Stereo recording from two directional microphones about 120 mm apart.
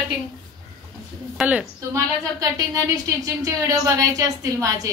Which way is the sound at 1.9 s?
25° right (ahead or behind).